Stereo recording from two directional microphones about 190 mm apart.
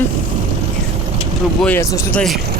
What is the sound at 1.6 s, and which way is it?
Speech, 10° left (ahead or behind).